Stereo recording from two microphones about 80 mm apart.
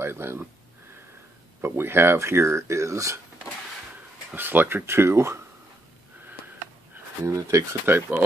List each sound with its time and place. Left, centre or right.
0.0 s speech: right
1.6 s speech: right
4.4 s speech: right
7.2 s speech: right
7.8 s speech: right